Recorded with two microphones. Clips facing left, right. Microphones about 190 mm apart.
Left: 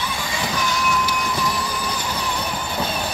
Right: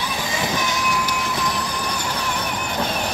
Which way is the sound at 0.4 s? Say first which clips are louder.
Left 1 dB; 20° right (ahead or behind).